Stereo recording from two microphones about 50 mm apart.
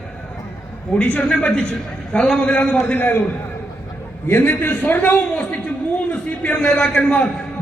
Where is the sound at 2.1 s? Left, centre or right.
Centre.